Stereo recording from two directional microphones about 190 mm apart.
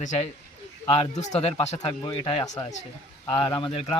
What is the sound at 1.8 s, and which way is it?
Speech, 20° left (ahead or behind).